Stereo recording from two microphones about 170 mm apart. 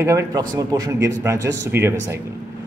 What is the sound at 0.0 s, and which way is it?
Speech, 20° right (ahead or behind).